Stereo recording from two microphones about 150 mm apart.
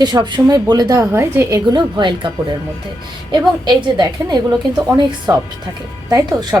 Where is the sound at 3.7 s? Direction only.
30° right (ahead or behind).